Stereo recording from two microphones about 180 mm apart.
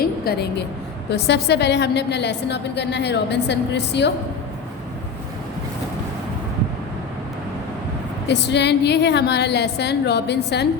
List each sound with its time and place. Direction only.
0.0 s a sound: 60° left (ahead or behind)
1.1 s a woman's voice: 65° left (ahead or behind)
8.3 s a woman's voice: 70° left (ahead or behind)